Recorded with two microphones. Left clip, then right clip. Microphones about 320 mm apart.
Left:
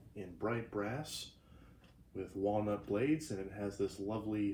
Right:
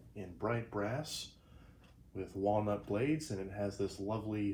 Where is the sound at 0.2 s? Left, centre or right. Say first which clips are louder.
Right 1 dB; centre.